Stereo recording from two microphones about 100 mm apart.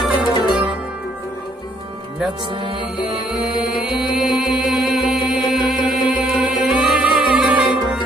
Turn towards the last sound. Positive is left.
turn(degrees=-5)  # may be behind; listen again after turning